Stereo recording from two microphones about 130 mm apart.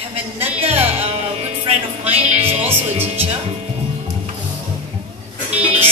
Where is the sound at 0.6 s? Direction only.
50° right (ahead or behind).